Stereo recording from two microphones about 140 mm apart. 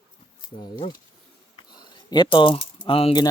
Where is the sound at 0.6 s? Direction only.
40° left (ahead or behind).